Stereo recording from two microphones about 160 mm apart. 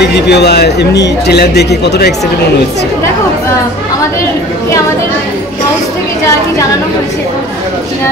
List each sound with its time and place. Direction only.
0.0 s a man's voice: 90° left